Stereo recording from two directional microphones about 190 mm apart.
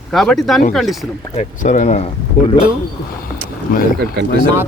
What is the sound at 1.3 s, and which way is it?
Speech, 40° left (ahead or behind).